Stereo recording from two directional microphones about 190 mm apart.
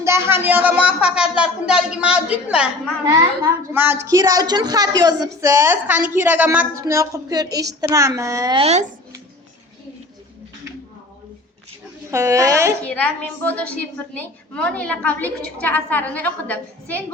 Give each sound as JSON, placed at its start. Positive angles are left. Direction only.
{"t": 0.0, "sound": "a woman's voice", "side_deg": -15}
{"t": 8.5, "sound": "speech", "side_deg": -35}
{"t": 12.1, "sound": "a woman's voice", "side_deg": -15}
{"t": 12.8, "sound": "a woman's voice", "side_deg": 10}